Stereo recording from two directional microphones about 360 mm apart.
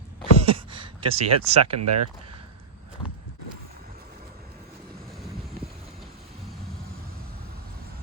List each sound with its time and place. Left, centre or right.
0.3 s speech: centre
1.7 s speech: right